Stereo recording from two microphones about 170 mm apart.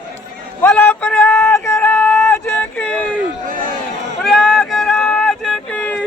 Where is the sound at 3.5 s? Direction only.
55° right (ahead or behind).